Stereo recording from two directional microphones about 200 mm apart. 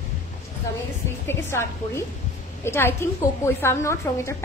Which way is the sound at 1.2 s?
15° left (ahead or behind).